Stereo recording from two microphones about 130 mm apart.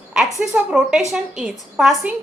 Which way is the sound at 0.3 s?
5° right (ahead or behind).